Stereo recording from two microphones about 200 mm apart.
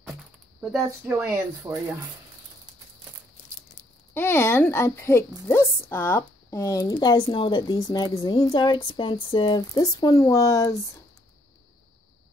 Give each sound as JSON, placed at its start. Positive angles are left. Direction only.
{"t": 0.6, "sound": "speech", "side_deg": -10}
{"t": 4.1, "sound": "speech", "side_deg": 10}